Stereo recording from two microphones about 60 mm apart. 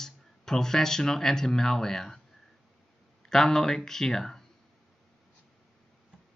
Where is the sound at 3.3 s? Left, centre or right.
Centre.